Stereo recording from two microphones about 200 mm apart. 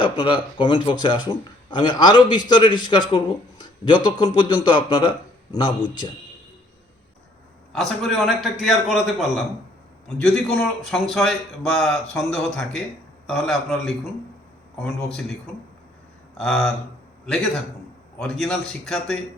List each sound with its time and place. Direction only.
0.0 s a man's voice: 25° left (ahead or behind)
7.7 s a man's voice: centre (ahead or behind)
16.4 s a man's voice: 5° left (ahead or behind)
18.2 s a man's voice: 5° left (ahead or behind)